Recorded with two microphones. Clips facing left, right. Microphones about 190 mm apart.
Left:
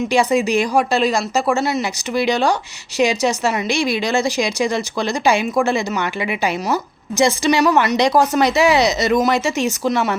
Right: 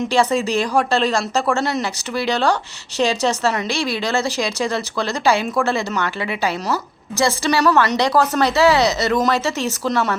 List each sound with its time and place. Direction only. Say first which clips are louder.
0.1 s a woman's voice: left 2 dB; 10° left (ahead or behind)